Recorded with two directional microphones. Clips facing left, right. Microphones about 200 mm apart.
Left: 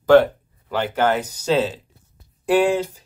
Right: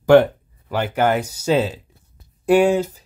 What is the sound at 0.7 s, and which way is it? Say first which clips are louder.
Speech: right 1 dB; 10° right (ahead or behind).